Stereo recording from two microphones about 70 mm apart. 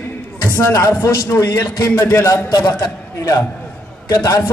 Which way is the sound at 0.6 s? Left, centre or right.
Left.